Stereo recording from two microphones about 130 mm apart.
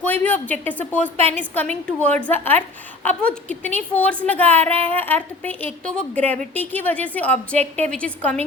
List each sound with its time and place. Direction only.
0.0 s a woman's voice: 15° left (ahead or behind)